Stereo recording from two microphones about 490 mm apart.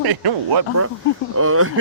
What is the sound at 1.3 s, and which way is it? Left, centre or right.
Speech, right.